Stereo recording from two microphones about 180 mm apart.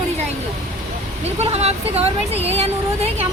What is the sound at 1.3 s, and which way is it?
Speech, 35° right (ahead or behind).